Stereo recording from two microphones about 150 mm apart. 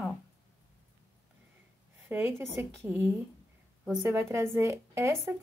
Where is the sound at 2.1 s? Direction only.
10° right (ahead or behind).